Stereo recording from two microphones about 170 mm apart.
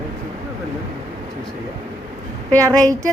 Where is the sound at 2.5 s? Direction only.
20° right (ahead or behind).